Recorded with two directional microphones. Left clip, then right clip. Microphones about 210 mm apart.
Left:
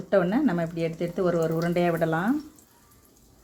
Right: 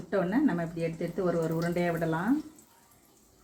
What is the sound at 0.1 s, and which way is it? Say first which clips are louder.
Speech: left 5 dB; 50° left (ahead or behind).